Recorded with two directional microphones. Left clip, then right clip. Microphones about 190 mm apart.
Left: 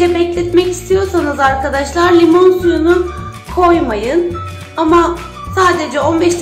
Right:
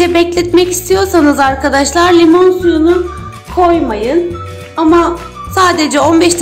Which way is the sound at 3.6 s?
25° right (ahead or behind).